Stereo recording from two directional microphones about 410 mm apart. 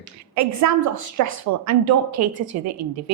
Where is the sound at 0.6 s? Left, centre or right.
Right.